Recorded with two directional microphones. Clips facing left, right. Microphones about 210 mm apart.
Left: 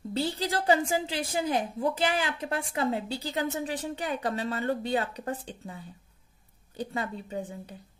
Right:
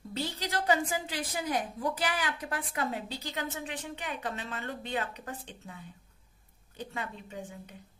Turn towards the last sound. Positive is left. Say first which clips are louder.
# left 6 dB
turn(degrees=35)  # may be behind; listen again after turning